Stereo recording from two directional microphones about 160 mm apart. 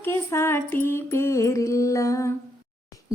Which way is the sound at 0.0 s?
15° left (ahead or behind).